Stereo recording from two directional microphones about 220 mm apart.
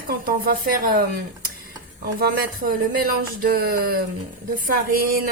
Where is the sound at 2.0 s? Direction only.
45° right (ahead or behind).